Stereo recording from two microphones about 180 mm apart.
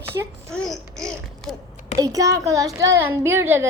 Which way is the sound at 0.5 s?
Centre (ahead or behind).